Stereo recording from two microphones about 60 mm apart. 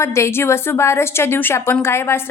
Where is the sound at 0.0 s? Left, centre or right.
Left.